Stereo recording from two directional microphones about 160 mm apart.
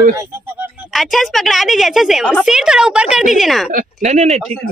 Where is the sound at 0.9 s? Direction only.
Centre (ahead or behind).